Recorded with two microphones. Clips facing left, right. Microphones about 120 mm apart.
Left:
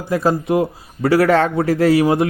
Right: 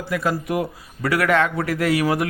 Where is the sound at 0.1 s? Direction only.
30° left (ahead or behind).